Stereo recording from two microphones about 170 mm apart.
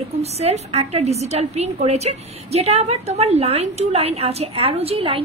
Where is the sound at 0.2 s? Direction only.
40° right (ahead or behind).